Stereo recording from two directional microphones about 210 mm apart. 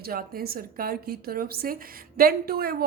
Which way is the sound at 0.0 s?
45° right (ahead or behind).